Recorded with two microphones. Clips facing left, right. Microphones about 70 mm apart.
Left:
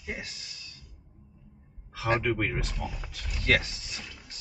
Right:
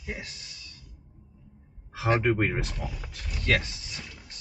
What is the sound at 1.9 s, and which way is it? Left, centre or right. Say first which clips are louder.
Speech: right 3 dB; centre.